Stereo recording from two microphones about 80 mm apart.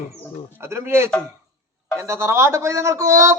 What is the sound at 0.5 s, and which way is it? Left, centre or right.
A man's voice, right.